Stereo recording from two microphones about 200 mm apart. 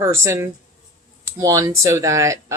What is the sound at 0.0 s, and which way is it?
Speech, 10° right (ahead or behind).